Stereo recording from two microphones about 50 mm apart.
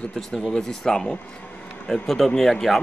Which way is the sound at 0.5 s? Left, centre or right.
Centre.